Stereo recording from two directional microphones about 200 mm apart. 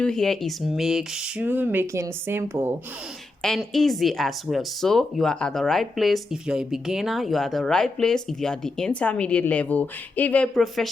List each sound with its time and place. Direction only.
0.0 s speech: 5° left (ahead or behind)
3.4 s speech: centre (ahead or behind)